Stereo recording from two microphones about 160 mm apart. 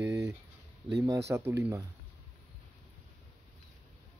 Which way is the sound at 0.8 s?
20° right (ahead or behind).